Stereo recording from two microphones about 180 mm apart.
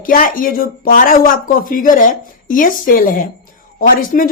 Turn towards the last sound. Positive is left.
turn(degrees=50)  # may be behind; listen again after turning